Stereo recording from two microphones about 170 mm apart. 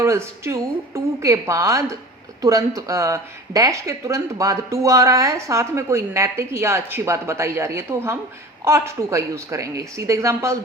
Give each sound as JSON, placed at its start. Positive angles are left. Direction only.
{"t": 0.0, "sound": "speech", "side_deg": -15}